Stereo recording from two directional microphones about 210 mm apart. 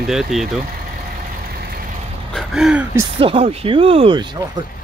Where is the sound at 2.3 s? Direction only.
Centre (ahead or behind).